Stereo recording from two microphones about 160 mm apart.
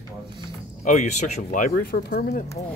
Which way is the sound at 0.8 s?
55° left (ahead or behind).